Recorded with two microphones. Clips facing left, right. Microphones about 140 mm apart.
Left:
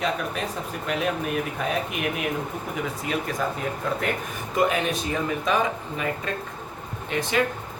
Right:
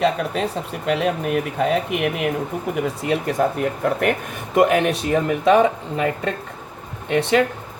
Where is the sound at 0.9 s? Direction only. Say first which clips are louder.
Right 6 dB; 75° right (ahead or behind).